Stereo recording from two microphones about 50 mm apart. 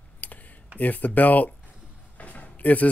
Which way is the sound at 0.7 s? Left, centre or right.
Left.